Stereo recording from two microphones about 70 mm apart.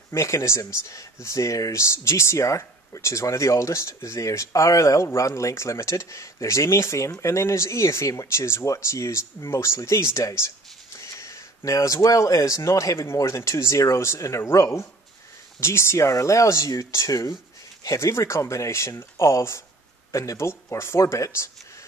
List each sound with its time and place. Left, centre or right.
0.1 s speech: left